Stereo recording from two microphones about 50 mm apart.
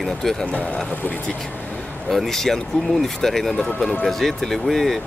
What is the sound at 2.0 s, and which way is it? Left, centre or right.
Speech, centre.